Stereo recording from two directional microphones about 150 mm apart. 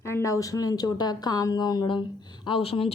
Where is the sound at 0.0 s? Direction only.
20° left (ahead or behind).